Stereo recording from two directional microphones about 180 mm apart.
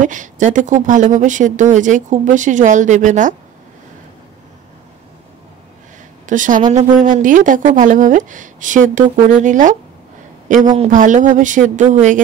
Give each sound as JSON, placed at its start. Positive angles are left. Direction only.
{"t": 0.0, "sound": "speech", "side_deg": -45}
{"t": 6.2, "sound": "speech", "side_deg": -45}
{"t": 10.9, "sound": "speech", "side_deg": -45}